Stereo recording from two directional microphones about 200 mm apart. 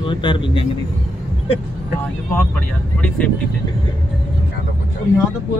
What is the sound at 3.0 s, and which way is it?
Speech, 5° left (ahead or behind).